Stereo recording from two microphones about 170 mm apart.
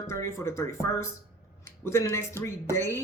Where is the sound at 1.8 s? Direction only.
15° left (ahead or behind).